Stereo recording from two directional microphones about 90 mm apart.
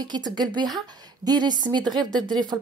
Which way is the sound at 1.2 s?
50° right (ahead or behind).